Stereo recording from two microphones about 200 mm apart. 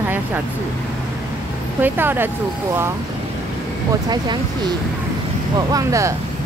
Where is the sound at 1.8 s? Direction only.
10° right (ahead or behind).